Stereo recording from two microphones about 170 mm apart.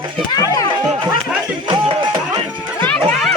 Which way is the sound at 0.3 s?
20° left (ahead or behind).